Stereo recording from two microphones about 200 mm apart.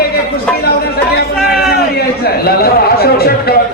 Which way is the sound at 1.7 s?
50° left (ahead or behind).